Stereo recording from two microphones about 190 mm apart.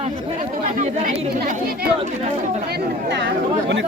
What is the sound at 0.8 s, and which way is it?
Speech, 40° right (ahead or behind).